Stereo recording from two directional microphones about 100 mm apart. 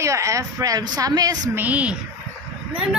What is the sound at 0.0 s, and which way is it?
A woman's voice, 30° right (ahead or behind).